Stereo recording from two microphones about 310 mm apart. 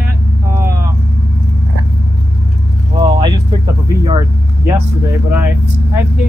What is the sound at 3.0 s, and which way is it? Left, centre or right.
Vehicle, centre.